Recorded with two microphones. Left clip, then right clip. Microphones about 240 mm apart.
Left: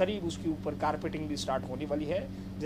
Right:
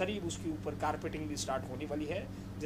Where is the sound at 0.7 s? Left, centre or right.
Centre.